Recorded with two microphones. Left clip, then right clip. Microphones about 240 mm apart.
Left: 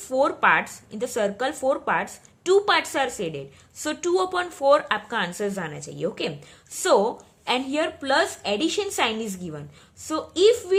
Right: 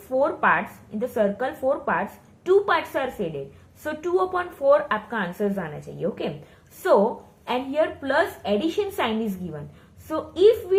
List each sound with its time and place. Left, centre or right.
0.2 s speech: left
7.4 s speech: left